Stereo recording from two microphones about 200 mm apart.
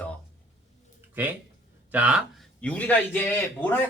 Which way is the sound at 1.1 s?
10° right (ahead or behind).